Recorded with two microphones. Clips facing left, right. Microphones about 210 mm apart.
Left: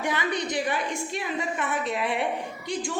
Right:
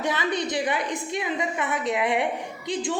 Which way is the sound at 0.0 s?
20° right (ahead or behind).